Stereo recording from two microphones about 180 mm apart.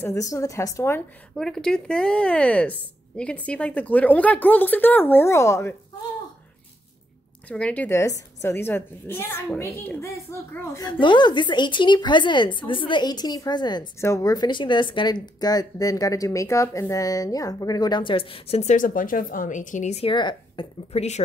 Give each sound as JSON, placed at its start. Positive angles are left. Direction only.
{"t": 0.0, "sound": "a woman's voice", "side_deg": 15}
{"t": 7.4, "sound": "a woman's voice", "side_deg": 5}